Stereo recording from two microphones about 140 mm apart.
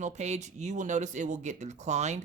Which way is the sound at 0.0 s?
55° right (ahead or behind).